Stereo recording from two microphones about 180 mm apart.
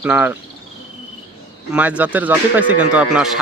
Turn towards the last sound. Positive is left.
turn(degrees=-5)  # may be behind; listen again after turning